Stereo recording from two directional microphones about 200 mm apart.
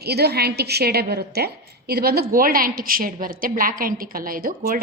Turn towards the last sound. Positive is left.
turn(degrees=-45)  # may be behind; listen again after turning